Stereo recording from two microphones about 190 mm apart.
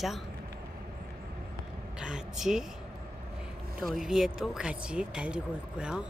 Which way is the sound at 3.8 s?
Centre (ahead or behind).